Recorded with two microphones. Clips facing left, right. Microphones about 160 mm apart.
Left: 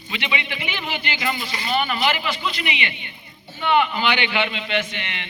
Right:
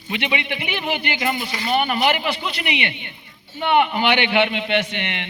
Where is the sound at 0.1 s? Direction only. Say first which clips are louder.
Right 4 dB; 55° right (ahead or behind).